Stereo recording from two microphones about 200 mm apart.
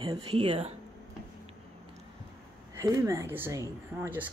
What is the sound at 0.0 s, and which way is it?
Speech, 25° right (ahead or behind).